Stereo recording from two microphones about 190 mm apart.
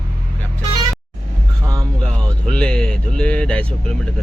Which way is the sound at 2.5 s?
5° left (ahead or behind).